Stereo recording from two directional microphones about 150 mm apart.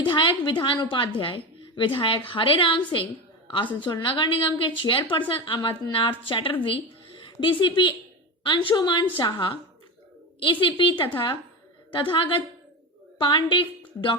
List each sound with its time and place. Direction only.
0.0 s a woman's voice: 35° left (ahead or behind)